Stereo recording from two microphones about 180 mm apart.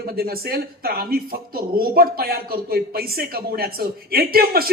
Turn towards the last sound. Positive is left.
turn(degrees=-55)  # may be behind; listen again after turning